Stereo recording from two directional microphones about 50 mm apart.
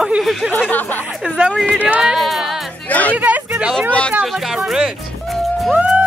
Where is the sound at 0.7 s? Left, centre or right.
Left.